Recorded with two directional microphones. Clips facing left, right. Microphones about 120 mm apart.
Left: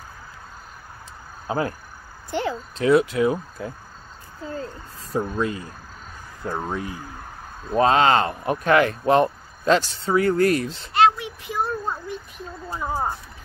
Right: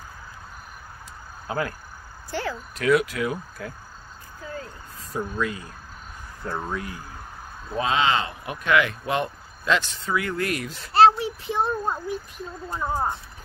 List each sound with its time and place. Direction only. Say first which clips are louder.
1.5 s speech: left 3 dB; 25° left (ahead or behind)
6.4 s speech: left 2 dB; 15° left (ahead or behind)
7.7 s speech: left 6 dB; 45° left (ahead or behind); by 10.9 s 30° left (ahead or behind)
10.9 s child singing: right 2 dB; 35° right (ahead or behind)
11.8 s a sound: right 2 dB; 15° right (ahead or behind)
12.6 s speech: even; 10° left (ahead or behind)